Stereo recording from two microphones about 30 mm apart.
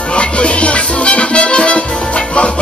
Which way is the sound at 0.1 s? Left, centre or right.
Left.